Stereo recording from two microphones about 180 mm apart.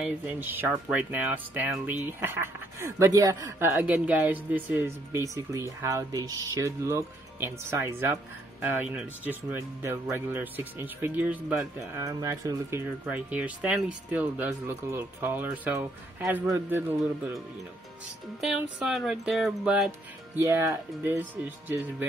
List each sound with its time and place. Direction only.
0.0 s speech: 10° right (ahead or behind)
12.0 s speech: 20° right (ahead or behind)
18.4 s music: centre (ahead or behind)
20.3 s speech: 15° right (ahead or behind)